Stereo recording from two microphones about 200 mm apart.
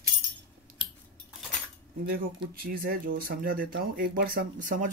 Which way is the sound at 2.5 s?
45° right (ahead or behind).